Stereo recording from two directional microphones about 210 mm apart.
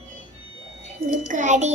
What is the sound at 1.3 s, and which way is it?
Speech, 35° right (ahead or behind).